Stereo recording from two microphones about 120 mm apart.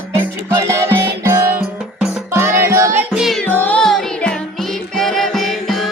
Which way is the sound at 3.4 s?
15° left (ahead or behind).